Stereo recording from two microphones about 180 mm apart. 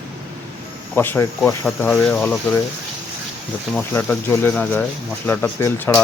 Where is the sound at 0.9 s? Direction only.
10° left (ahead or behind).